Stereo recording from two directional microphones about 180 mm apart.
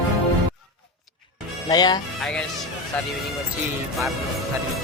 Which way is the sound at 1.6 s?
20° left (ahead or behind).